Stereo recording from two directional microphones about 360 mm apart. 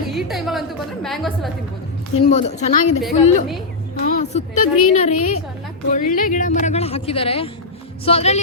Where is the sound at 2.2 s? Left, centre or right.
Centre.